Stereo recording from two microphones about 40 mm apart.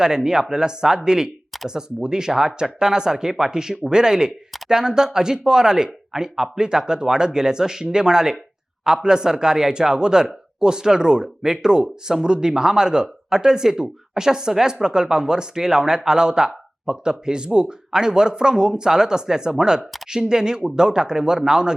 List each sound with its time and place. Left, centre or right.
0.0 s speech: centre